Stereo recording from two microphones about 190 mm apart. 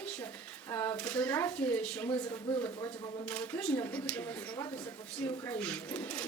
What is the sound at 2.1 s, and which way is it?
A woman's voice, 15° left (ahead or behind).